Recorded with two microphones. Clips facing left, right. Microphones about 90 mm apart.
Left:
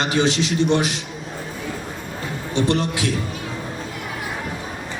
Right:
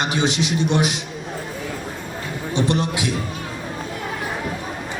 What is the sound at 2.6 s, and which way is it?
Speech, 15° right (ahead or behind).